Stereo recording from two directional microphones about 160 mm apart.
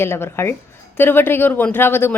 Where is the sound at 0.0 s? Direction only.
15° left (ahead or behind).